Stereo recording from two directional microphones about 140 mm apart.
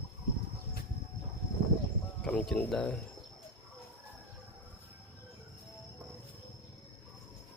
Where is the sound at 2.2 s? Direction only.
5° left (ahead or behind).